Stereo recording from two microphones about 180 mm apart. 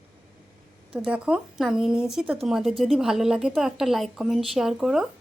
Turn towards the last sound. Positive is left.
turn(degrees=0)  # may be behind; listen again after turning